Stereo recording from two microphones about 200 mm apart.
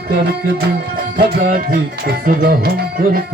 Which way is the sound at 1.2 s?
45° right (ahead or behind).